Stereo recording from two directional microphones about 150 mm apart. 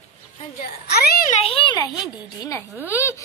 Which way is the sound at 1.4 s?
35° left (ahead or behind).